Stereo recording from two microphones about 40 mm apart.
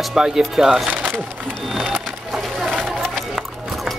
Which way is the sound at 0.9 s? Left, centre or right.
Right.